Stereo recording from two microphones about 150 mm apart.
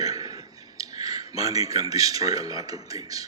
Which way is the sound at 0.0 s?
25° right (ahead or behind).